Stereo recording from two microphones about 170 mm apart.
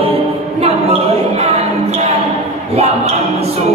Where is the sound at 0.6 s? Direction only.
40° right (ahead or behind).